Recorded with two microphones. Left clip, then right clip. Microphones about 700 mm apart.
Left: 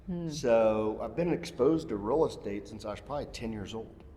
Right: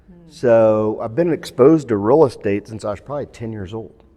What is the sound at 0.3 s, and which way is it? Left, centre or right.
Speech, right.